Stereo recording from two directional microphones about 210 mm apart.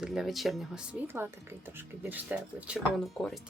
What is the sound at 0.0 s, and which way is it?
Speech, centre (ahead or behind).